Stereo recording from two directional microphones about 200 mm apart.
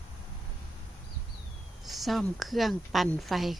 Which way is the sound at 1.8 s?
Centre (ahead or behind).